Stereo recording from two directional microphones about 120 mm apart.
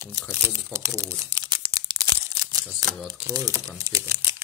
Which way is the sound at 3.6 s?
25° right (ahead or behind).